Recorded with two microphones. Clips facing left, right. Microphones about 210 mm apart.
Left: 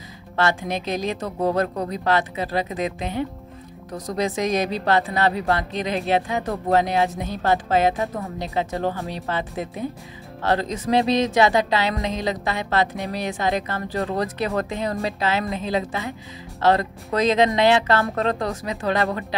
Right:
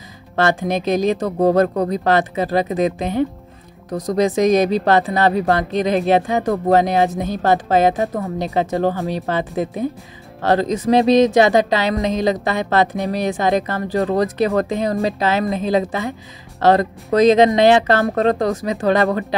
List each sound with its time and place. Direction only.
0.4 s speech: 45° right (ahead or behind)